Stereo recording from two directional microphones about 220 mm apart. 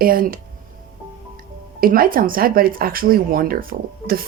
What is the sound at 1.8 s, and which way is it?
Speech, 40° right (ahead or behind).